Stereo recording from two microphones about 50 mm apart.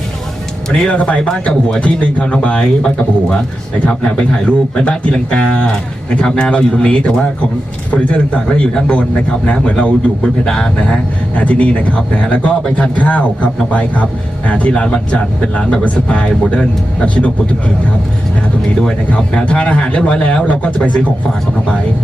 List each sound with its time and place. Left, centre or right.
0.9 s a man's voice: left
10.4 s speech: centre
11.3 s a man's voice: left
14.7 s a man's voice: left
18.8 s a man's voice: centre